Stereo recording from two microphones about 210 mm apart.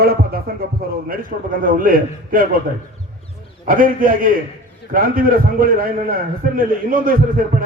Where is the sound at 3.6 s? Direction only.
40° right (ahead or behind).